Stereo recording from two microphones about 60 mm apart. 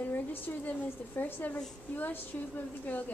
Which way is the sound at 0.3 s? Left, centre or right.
Left.